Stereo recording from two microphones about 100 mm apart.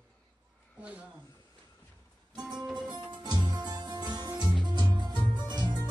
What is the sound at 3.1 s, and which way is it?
Music, 50° right (ahead or behind).